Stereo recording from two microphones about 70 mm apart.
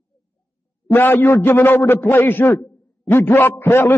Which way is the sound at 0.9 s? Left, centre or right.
Left.